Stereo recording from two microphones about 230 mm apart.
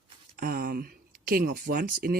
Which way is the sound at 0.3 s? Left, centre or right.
Right.